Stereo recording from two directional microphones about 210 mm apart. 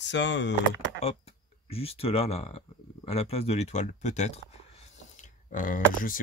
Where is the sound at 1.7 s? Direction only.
30° left (ahead or behind).